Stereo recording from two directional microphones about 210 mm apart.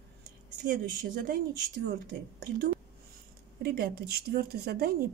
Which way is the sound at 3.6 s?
50° right (ahead or behind).